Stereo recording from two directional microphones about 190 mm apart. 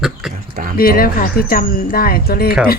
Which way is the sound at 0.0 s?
Centre (ahead or behind).